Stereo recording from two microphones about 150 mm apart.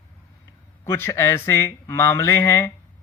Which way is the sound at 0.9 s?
15° left (ahead or behind).